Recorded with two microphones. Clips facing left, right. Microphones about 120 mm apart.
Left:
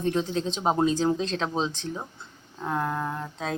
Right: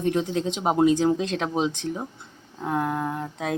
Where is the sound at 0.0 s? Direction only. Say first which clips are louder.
Right 2 dB; 15° right (ahead or behind).